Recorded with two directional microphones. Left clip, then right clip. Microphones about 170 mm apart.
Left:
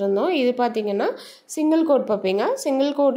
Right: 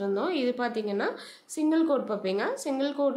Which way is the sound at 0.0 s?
30° left (ahead or behind).